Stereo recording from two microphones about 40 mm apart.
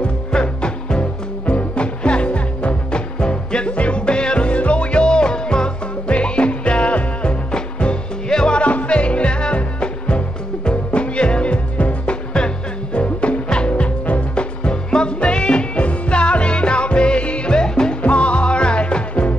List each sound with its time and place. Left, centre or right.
0.3 s music: left
8.6 s music: left
18.0 s music: left